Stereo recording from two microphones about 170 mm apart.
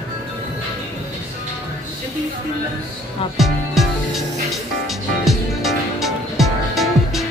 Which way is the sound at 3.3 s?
Centre (ahead or behind).